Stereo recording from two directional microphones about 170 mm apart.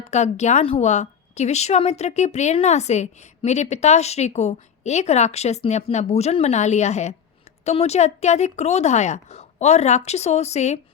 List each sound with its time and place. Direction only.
0.1 s a woman's voice: 40° left (ahead or behind)